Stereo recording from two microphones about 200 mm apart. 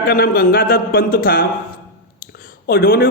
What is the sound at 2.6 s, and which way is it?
Speech, 50° left (ahead or behind).